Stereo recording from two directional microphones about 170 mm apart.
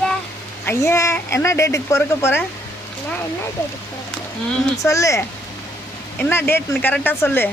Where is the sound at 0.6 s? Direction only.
15° left (ahead or behind).